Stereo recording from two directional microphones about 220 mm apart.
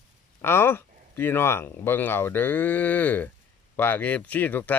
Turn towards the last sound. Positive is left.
turn(degrees=10)  # may be behind; listen again after turning